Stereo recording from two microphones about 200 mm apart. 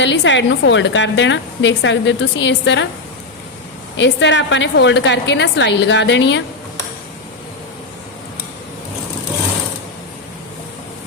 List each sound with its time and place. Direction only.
0.0 s a woman's voice: 65° left (ahead or behind)
3.9 s a woman's voice: 65° left (ahead or behind)